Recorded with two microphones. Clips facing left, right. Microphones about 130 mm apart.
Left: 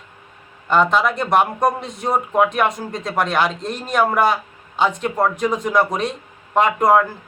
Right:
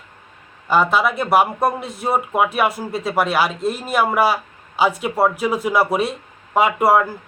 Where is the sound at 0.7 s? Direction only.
5° right (ahead or behind).